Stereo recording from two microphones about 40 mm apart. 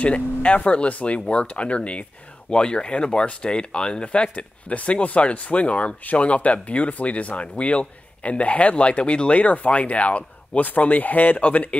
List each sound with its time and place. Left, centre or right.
0.0 s speech: left